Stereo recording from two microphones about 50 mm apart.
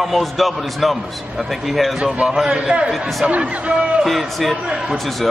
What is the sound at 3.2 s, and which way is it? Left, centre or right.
Speech, right.